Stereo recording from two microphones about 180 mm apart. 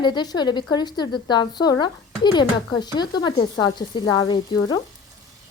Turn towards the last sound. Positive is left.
turn(degrees=20)  # may be behind; listen again after turning